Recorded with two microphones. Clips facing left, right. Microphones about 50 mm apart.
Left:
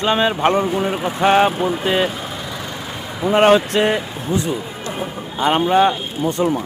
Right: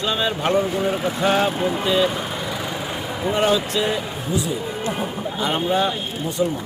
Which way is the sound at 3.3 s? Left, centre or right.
Left.